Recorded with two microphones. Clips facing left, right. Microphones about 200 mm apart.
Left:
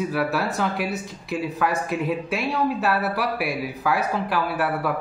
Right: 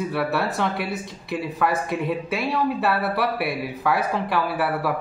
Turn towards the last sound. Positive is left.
turn(degrees=0)  # may be behind; listen again after turning